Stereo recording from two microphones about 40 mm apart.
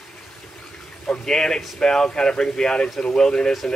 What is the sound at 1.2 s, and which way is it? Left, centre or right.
A man's voice, centre.